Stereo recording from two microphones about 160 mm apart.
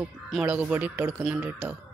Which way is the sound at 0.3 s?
5° right (ahead or behind).